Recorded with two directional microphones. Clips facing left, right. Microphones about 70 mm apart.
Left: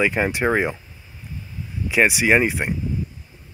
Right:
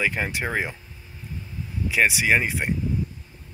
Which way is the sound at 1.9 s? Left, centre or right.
Centre.